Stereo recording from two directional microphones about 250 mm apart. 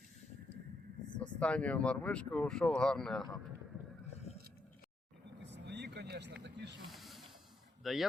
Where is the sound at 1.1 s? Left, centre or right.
Centre.